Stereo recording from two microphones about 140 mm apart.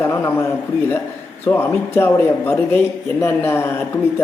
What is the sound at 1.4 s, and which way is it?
A man's voice, 15° left (ahead or behind).